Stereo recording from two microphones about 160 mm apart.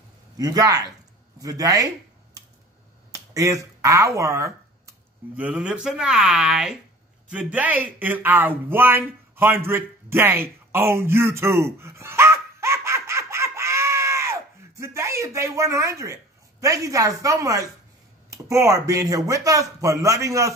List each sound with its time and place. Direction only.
0.4 s speech: 25° right (ahead or behind)
3.1 s finger snapping: 20° right (ahead or behind)
5.3 s speech: 5° right (ahead or behind)